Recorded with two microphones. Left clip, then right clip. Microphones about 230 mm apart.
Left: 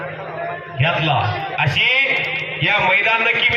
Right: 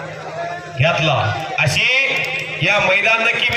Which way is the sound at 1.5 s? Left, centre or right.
Right.